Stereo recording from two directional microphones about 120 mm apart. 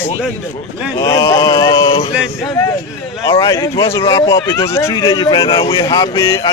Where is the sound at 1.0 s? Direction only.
30° left (ahead or behind).